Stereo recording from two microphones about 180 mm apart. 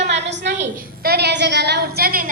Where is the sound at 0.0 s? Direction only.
70° right (ahead or behind).